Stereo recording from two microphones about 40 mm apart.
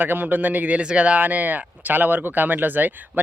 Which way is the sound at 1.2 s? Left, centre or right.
Right.